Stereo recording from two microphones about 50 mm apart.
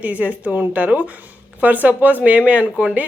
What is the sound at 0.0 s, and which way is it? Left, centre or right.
A woman's voice, right.